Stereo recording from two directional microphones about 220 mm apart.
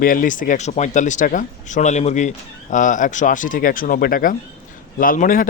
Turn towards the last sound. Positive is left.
turn(degrees=35)  # may be behind; listen again after turning